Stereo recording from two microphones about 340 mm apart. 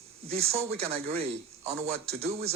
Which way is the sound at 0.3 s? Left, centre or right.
Centre.